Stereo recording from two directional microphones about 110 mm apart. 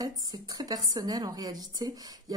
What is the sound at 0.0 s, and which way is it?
A woman's voice, 35° right (ahead or behind).